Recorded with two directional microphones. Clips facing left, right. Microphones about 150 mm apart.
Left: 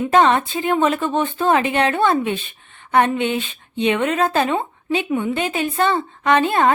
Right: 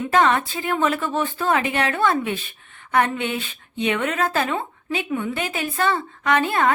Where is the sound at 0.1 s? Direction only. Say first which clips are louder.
Left 3 dB; 25° left (ahead or behind).